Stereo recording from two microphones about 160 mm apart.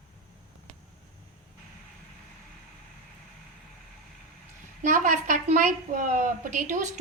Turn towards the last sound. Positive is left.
turn(degrees=-55)  # may be behind; listen again after turning